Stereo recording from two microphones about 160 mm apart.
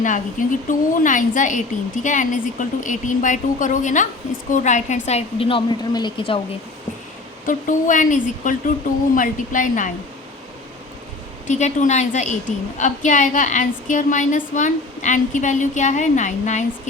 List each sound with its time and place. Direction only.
0.0 s a woman's voice: 55° left (ahead or behind); by 6.4 s 35° left (ahead or behind)
7.4 s a woman's voice: 55° left (ahead or behind)
11.4 s a woman's voice: 50° left (ahead or behind)